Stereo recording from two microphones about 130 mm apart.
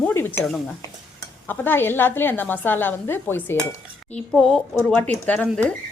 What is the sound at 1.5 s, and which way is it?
A woman's voice, 15° left (ahead or behind).